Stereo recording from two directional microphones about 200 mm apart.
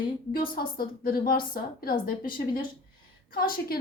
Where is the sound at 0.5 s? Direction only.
45° left (ahead or behind).